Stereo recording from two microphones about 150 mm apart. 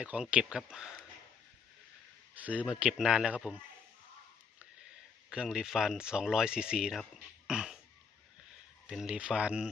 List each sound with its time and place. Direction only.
0.0 s speech: 10° right (ahead or behind)
2.3 s speech: 10° right (ahead or behind)
5.3 s speech: 5° right (ahead or behind)
7.4 s a sound: 5° right (ahead or behind)
8.9 s speech: 5° right (ahead or behind)